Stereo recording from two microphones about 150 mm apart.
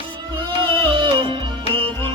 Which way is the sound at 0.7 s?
35° right (ahead or behind).